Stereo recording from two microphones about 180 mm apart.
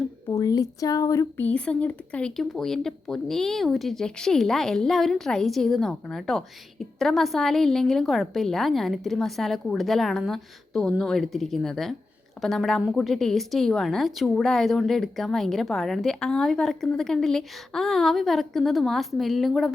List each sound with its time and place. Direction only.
0.3 s speech: 20° left (ahead or behind); by 19.7 s centre (ahead or behind)